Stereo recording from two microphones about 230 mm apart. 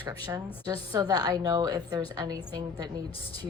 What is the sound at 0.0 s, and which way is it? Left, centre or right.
A woman's voice, centre.